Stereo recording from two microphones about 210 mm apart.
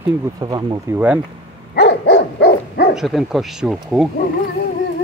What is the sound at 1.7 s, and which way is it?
Dog, 50° left (ahead or behind).